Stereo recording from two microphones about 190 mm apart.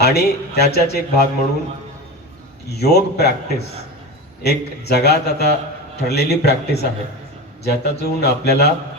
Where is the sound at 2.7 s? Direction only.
60° left (ahead or behind).